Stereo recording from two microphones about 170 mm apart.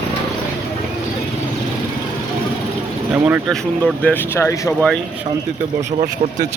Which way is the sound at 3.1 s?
10° right (ahead or behind).